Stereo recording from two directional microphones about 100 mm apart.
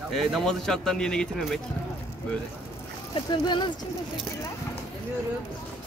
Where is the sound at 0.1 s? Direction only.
Centre (ahead or behind).